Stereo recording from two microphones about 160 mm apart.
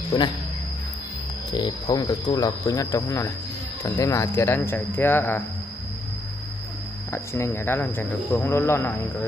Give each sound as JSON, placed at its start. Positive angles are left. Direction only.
{"t": 1.5, "sound": "speech", "side_deg": 25}
{"t": 7.1, "sound": "speech", "side_deg": 15}